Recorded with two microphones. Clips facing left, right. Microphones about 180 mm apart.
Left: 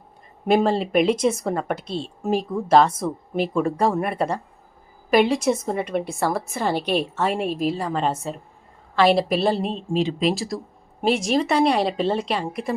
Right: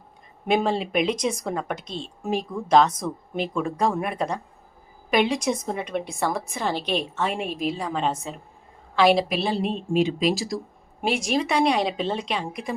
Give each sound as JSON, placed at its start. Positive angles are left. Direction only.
{"t": 0.4, "sound": "speech", "side_deg": 5}
{"t": 9.6, "sound": "speech", "side_deg": 35}
{"t": 11.0, "sound": "speech", "side_deg": 0}